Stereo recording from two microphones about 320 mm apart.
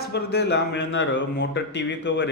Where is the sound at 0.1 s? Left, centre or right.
Left.